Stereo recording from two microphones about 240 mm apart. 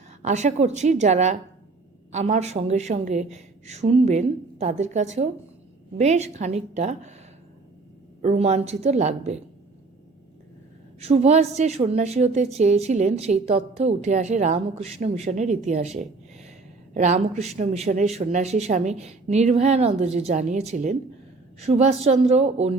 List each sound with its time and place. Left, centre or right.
0.2 s a woman's voice: right
8.2 s a woman's voice: right
11.0 s a woman's voice: right